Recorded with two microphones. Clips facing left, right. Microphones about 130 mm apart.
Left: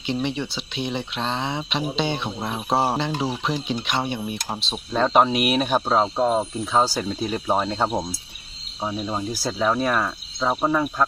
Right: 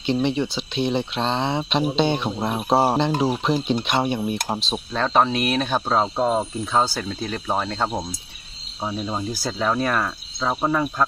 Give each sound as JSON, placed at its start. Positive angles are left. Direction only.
{"t": 0.2, "sound": "speech", "side_deg": -20}
{"t": 3.1, "sound": "speech", "side_deg": -45}
{"t": 3.4, "sound": "speech", "side_deg": -20}
{"t": 4.9, "sound": "speech", "side_deg": 10}
{"t": 6.0, "sound": "speech", "side_deg": 0}